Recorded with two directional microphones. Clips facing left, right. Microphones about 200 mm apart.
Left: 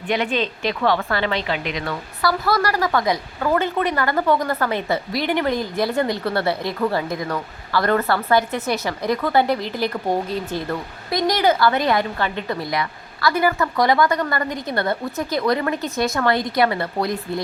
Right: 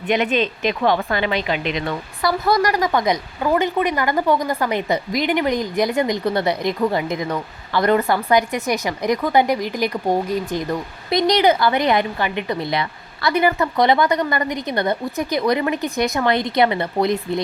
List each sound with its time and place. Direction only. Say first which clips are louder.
0.1 s a woman's voice: right 3 dB; 20° right (ahead or behind)